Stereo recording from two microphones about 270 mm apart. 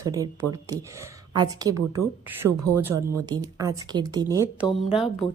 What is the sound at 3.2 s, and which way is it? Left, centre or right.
A woman's voice, centre.